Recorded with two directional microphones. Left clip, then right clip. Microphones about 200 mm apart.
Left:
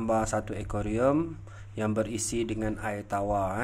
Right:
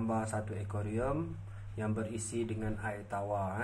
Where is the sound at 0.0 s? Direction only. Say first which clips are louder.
Left 8 dB; 50° left (ahead or behind).